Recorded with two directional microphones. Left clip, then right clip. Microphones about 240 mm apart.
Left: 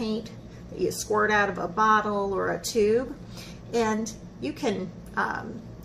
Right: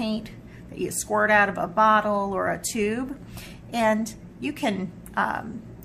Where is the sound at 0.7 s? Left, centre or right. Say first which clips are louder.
Right 1 dB; right.